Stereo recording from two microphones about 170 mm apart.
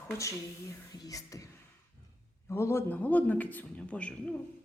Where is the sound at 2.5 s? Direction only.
15° left (ahead or behind).